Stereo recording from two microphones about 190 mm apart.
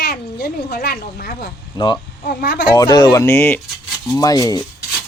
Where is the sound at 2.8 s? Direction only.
20° left (ahead or behind).